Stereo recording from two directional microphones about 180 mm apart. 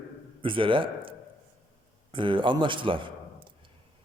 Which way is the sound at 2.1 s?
30° right (ahead or behind).